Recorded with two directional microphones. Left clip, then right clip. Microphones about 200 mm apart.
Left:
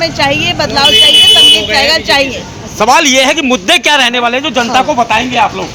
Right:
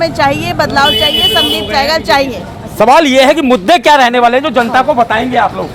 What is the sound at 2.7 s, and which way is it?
Speech, 55° right (ahead or behind).